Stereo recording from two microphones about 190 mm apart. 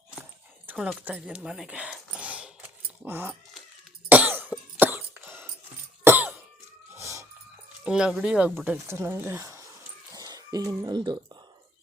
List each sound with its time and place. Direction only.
0.7 s speech: 5° right (ahead or behind)
4.1 s cough: 10° right (ahead or behind)
6.9 s a sound: 15° right (ahead or behind)
7.9 s speech: 5° right (ahead or behind)
10.1 s cough: 20° right (ahead or behind)